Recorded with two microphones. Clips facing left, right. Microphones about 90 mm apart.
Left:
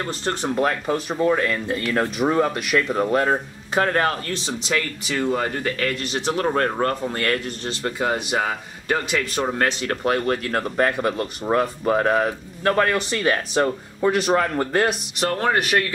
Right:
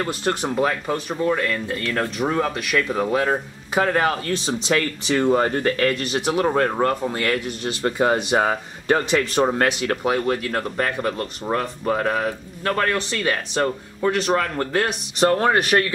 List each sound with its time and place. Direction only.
0.0 s speech: 15° right (ahead or behind)
4.6 s speech: 25° right (ahead or behind)
6.5 s speech: 15° right (ahead or behind)
7.8 s speech: 25° right (ahead or behind)
10.0 s speech: 5° right (ahead or behind)
15.1 s speech: 15° right (ahead or behind)